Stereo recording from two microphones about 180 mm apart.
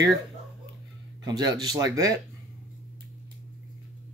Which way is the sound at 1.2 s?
20° right (ahead or behind).